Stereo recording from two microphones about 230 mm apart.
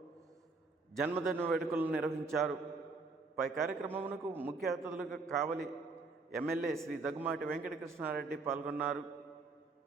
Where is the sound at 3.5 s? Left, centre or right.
Centre.